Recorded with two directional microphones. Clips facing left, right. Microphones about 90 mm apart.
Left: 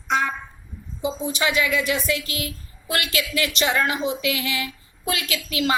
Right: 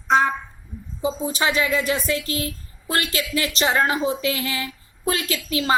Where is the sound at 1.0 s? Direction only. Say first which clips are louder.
Right 1 dB; 35° right (ahead or behind).